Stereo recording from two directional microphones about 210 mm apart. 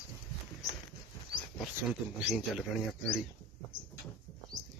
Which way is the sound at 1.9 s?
5° right (ahead or behind).